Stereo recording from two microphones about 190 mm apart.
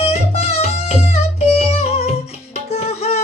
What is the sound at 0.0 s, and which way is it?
Music, 30° left (ahead or behind).